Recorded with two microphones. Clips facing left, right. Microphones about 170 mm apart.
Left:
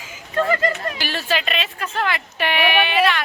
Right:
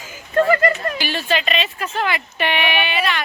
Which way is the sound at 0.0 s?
50° right (ahead or behind).